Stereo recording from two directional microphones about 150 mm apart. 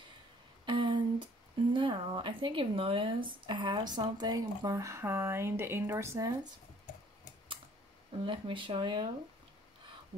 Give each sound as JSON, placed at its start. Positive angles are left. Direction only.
{"t": 0.7, "sound": "speech", "side_deg": -30}
{"t": 8.3, "sound": "speech", "side_deg": -35}